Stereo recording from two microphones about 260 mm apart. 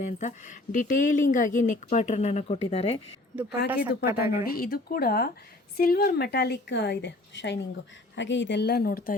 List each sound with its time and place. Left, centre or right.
0.2 s speech: left
3.7 s speech: centre
4.3 s a woman's voice: left